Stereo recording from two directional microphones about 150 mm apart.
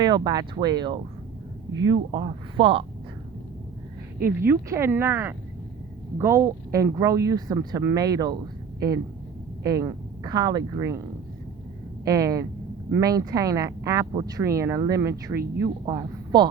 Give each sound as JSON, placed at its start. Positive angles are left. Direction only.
{"t": 0.0, "sound": "speech", "side_deg": -25}
{"t": 4.4, "sound": "speech", "side_deg": -15}
{"t": 9.6, "sound": "speech", "side_deg": -25}
{"t": 12.0, "sound": "speech", "side_deg": -20}